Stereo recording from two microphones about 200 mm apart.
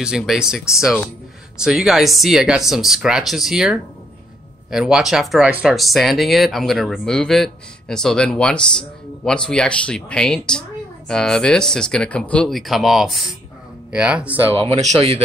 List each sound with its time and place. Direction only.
0.0 s speech: 5° right (ahead or behind)
1.6 s speech: centre (ahead or behind)
14.5 s speech: 30° right (ahead or behind)